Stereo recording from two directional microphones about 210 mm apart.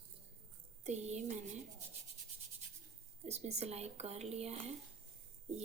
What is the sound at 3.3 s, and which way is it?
A woman's voice, 30° right (ahead or behind).